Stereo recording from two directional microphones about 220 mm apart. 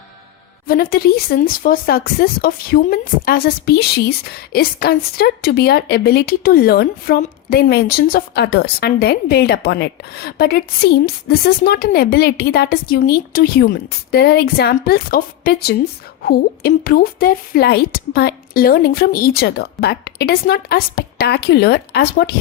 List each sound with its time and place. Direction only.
0.7 s speech: 40° left (ahead or behind)